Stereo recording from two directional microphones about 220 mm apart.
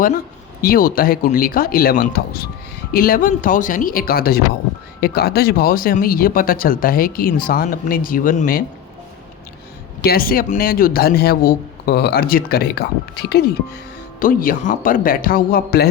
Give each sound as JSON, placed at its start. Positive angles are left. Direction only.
{"t": 0.6, "sound": "speech", "side_deg": 40}
{"t": 10.0, "sound": "a man's voice", "side_deg": 45}